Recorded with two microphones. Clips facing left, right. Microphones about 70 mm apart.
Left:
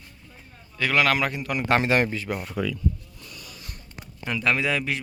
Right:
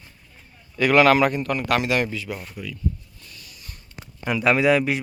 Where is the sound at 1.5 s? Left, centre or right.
Left.